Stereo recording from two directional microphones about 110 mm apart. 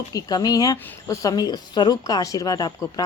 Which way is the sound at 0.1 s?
35° left (ahead or behind).